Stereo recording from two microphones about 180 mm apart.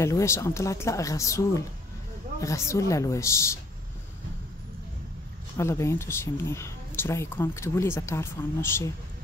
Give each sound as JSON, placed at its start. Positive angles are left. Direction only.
{"t": 0.0, "sound": "speech", "side_deg": 15}
{"t": 5.6, "sound": "speech", "side_deg": 15}